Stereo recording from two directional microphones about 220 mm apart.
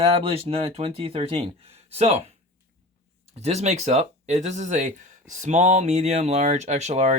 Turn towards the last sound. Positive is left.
turn(degrees=-30)  # may be behind; listen again after turning